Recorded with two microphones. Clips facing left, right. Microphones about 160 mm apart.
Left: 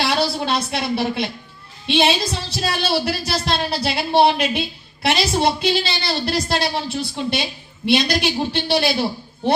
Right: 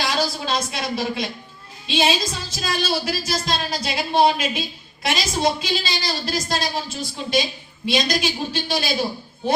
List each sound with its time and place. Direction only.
0.0 s a woman's voice: 60° left (ahead or behind)